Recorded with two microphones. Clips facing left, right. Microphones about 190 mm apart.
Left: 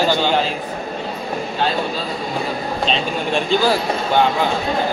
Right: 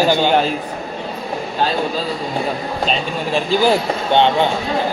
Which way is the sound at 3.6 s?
25° right (ahead or behind).